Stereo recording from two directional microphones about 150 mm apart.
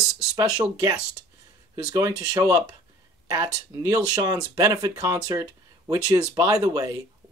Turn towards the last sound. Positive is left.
turn(degrees=-20)  # may be behind; listen again after turning